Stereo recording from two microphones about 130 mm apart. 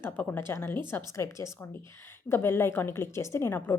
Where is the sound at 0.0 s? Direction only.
15° left (ahead or behind).